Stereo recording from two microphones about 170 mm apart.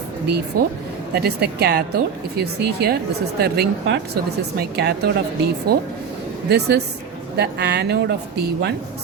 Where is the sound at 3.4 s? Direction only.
70° right (ahead or behind).